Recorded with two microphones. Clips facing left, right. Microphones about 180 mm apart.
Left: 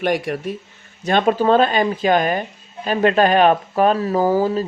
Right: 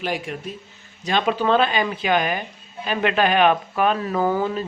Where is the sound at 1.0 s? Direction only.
50° left (ahead or behind).